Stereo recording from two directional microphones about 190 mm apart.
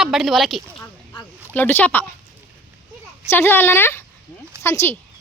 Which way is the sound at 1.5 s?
10° left (ahead or behind).